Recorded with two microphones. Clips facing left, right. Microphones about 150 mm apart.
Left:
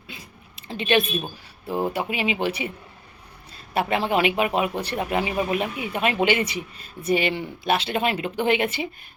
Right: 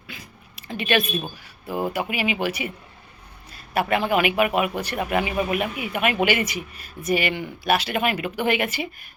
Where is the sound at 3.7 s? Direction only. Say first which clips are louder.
Right 1 dB; 25° left (ahead or behind).